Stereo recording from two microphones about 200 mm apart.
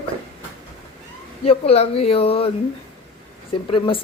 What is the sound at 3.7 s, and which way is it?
Speech, 25° left (ahead or behind).